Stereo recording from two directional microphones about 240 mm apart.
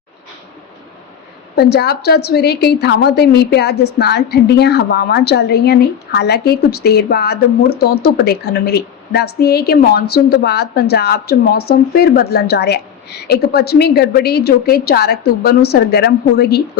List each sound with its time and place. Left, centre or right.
1.5 s a woman's voice: left